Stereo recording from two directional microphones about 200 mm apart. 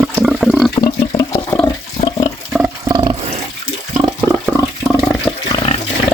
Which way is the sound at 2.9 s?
20° right (ahead or behind).